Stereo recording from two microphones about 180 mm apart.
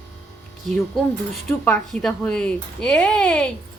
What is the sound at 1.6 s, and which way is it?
Speech, 5° left (ahead or behind).